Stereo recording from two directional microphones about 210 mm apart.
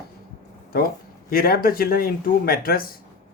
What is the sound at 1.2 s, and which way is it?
Speech, 45° left (ahead or behind).